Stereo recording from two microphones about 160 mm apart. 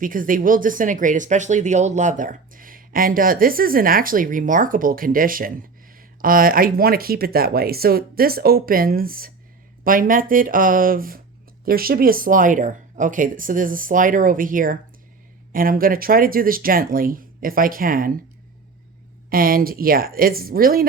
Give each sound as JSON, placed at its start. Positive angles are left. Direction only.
{"t": 0.0, "sound": "speech", "side_deg": -60}
{"t": 19.3, "sound": "speech", "side_deg": -65}